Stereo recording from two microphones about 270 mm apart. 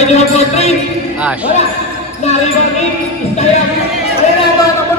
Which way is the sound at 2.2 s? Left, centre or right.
Left.